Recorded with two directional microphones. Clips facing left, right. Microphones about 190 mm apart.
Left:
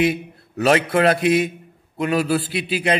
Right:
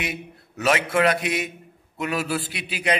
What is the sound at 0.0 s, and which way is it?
A man's voice, 30° left (ahead or behind).